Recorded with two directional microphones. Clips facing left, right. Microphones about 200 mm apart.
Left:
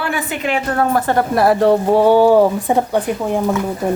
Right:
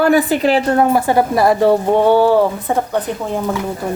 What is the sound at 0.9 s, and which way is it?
Speech, 10° right (ahead or behind).